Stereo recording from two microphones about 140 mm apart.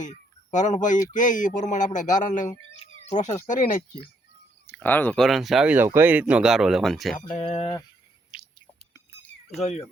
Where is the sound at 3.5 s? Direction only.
70° left (ahead or behind).